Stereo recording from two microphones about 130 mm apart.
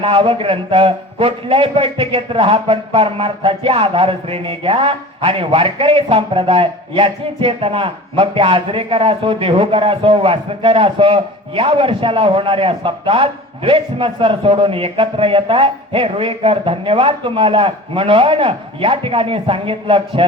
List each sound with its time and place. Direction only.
0.0 s a man's voice: 45° right (ahead or behind)